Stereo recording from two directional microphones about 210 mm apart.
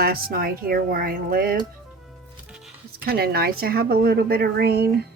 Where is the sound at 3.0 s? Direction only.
45° right (ahead or behind).